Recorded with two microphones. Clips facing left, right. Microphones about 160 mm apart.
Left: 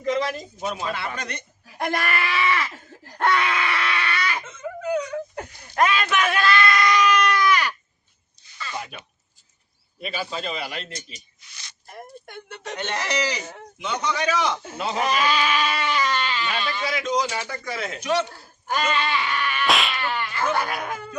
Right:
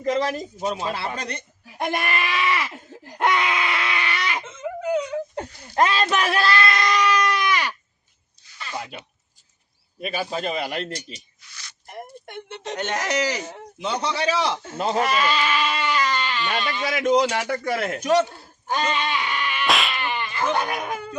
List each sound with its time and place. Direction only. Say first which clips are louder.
0.0 s a man's voice: right 2 dB; 40° right (ahead or behind)
1.8 s screaming: even; 20° right (ahead or behind)
8.6 s a sound: right 1 dB; 20° right (ahead or behind)
10.0 s a man's voice: right 3 dB; 45° right (ahead or behind)
12.3 s a sound: right 4 dB; 25° right (ahead or behind)
12.7 s a man's voice: right 2 dB; 45° right (ahead or behind)
13.7 s a man's voice: right 1 dB; 35° right (ahead or behind)
15.0 s goat: even; 15° left (ahead or behind)
16.3 s speech: right 1 dB; 5° left (ahead or behind)
16.9 s a man's voice: right 7 dB; 55° right (ahead or behind)
17.2 s a man's voice: right 6 dB; 70° right (ahead or behind); by 18.3 s 40° right (ahead or behind)
18.3 s a sound: right 1 dB; 20° right (ahead or behind)
19.6 s a sound: even; centre (ahead or behind)
20.0 s goat: even; 15° right (ahead or behind)